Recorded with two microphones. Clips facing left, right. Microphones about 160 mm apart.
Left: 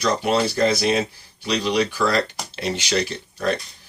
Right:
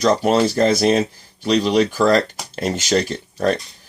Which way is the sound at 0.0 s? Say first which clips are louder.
Right 5 dB; 40° right (ahead or behind).